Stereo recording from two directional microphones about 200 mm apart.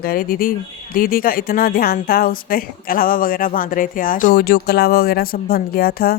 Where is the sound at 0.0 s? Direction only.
45° left (ahead or behind).